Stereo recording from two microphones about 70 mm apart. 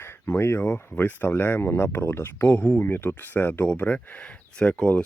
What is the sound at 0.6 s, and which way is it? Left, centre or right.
Speech, left.